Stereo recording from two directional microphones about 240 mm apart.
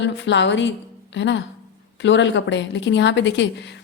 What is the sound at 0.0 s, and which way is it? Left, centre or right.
A woman's voice, left.